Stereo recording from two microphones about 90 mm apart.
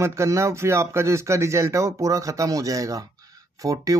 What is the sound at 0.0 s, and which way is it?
Speech, 35° right (ahead or behind).